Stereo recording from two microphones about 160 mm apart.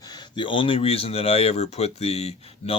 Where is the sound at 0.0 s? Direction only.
25° left (ahead or behind).